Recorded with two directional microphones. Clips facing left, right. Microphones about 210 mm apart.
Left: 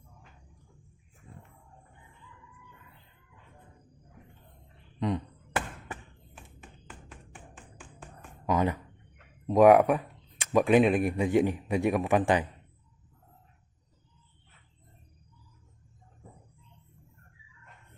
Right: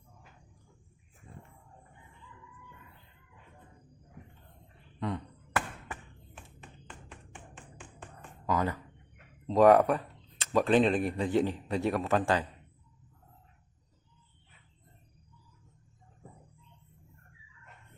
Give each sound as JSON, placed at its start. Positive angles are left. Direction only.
{"t": 4.9, "sound": "a sound", "side_deg": 20}
{"t": 6.8, "sound": "music", "side_deg": 0}
{"t": 8.4, "sound": "speech", "side_deg": 20}